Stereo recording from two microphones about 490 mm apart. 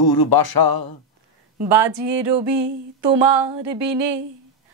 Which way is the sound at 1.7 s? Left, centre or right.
Right.